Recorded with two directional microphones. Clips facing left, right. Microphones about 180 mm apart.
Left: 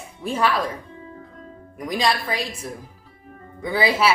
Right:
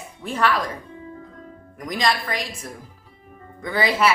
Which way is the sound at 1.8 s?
10° left (ahead or behind).